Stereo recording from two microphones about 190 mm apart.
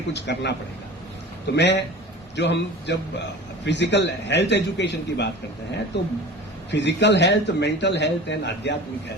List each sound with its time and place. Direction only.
0.1 s a man's voice: 65° left (ahead or behind)
1.5 s a man's voice: 65° left (ahead or behind)